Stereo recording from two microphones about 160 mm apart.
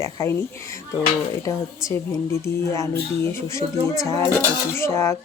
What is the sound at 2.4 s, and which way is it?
Speech, 20° left (ahead or behind).